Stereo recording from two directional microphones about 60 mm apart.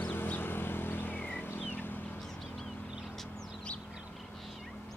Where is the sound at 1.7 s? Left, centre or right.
Left.